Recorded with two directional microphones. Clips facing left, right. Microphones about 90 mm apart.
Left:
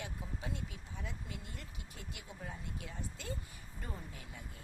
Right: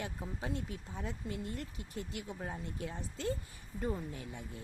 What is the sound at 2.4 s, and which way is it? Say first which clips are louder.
Speech: right 3 dB; 40° right (ahead or behind).